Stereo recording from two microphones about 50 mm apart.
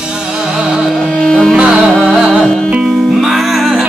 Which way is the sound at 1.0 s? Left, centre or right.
Centre.